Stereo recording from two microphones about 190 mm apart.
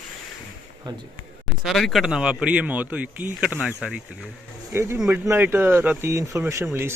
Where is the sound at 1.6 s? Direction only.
Centre (ahead or behind).